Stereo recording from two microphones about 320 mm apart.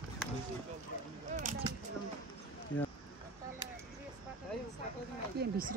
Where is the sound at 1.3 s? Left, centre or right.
Right.